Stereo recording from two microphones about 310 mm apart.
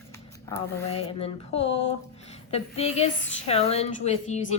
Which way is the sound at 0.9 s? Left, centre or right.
Centre.